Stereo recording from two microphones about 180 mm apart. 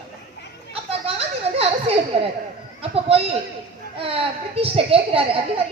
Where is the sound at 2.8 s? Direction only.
30° right (ahead or behind).